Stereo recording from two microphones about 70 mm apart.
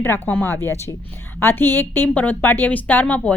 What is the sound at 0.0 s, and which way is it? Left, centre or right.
A woman's voice, left.